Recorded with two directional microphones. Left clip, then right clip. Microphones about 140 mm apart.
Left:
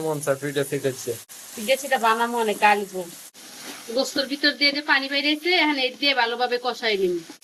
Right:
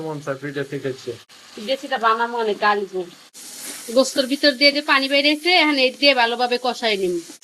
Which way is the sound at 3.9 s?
70° right (ahead or behind).